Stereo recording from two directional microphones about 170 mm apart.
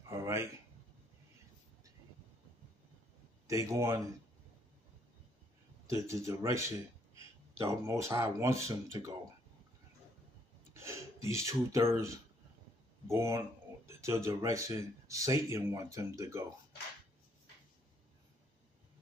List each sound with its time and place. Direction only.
0.0 s a sound: 15° right (ahead or behind)
3.4 s speech: 20° right (ahead or behind)
5.9 s speech: 15° right (ahead or behind)
7.6 s speech: 20° right (ahead or behind)
10.7 s speech: 15° right (ahead or behind)